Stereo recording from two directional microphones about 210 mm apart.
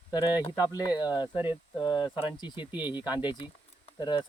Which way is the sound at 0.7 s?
20° left (ahead or behind).